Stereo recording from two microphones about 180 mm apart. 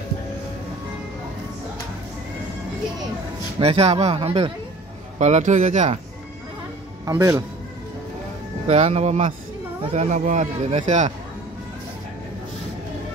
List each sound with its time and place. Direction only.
3.5 s a man's voice: 35° right (ahead or behind)
7.1 s a man's voice: 20° right (ahead or behind)
8.6 s a man's voice: 40° right (ahead or behind)